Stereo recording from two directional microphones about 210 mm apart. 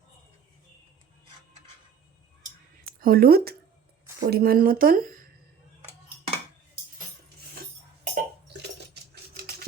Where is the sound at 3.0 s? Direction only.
45° right (ahead or behind).